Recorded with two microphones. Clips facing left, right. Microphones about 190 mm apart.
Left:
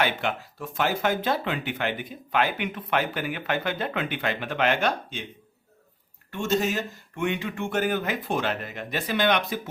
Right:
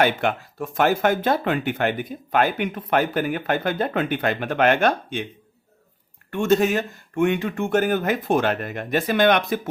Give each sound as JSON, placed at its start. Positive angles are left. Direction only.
{"t": 0.0, "sound": "speech", "side_deg": -50}
{"t": 6.3, "sound": "speech", "side_deg": -55}